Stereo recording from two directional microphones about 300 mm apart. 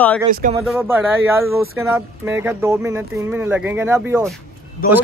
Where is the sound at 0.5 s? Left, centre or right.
Centre.